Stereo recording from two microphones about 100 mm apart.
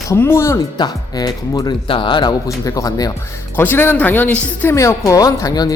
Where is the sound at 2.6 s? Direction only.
35° left (ahead or behind).